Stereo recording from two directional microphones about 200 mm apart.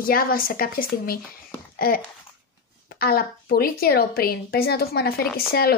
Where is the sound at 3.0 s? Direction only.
50° left (ahead or behind).